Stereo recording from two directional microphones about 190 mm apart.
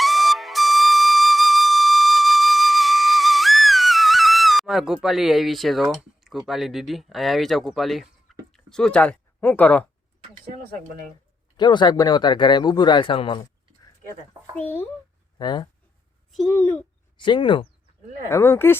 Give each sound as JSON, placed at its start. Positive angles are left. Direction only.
{"t": 0.0, "sound": "flute", "side_deg": 0}
{"t": 8.5, "sound": "speech", "side_deg": 5}
{"t": 10.4, "sound": "speech", "side_deg": -50}
{"t": 11.5, "sound": "a man's voice", "side_deg": 25}
{"t": 14.5, "sound": "speech", "side_deg": 10}
{"t": 15.4, "sound": "a man's voice", "side_deg": 20}
{"t": 16.3, "sound": "a child's voice", "side_deg": 0}
{"t": 17.2, "sound": "a man's voice", "side_deg": 25}
{"t": 18.3, "sound": "speech", "side_deg": 15}